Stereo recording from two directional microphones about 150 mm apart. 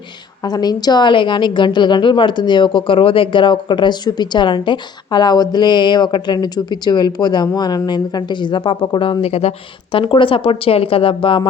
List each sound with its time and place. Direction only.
0.4 s a woman's voice: 25° left (ahead or behind)